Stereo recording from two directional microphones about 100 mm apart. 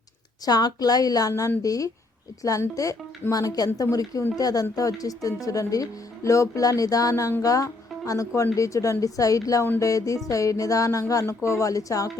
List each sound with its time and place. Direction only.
0.4 s speech: 40° left (ahead or behind)